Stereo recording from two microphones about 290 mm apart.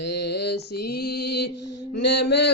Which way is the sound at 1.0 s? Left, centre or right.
Left.